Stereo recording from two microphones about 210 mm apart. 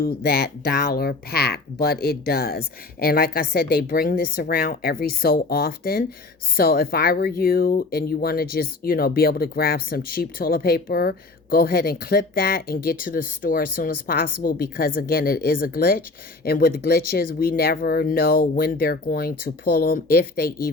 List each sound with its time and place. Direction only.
0.0 s a woman's voice: 45° left (ahead or behind)